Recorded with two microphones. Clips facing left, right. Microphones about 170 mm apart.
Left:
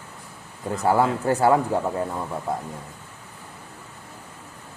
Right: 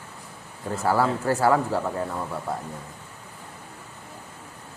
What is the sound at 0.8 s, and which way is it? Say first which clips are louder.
Speech: left 2 dB; 20° left (ahead or behind).